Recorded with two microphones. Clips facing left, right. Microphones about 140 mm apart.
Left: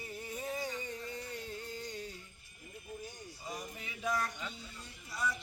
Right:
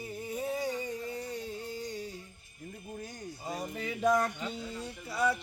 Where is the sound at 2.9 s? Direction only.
60° right (ahead or behind).